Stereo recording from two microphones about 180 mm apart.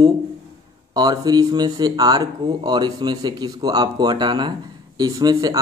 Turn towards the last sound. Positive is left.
turn(degrees=-20)  # may be behind; listen again after turning